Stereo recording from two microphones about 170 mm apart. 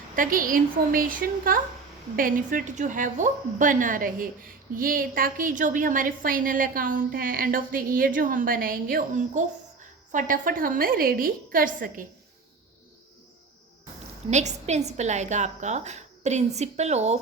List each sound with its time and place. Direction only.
0.2 s a woman's voice: 55° right (ahead or behind)
14.3 s a woman's voice: 45° right (ahead or behind)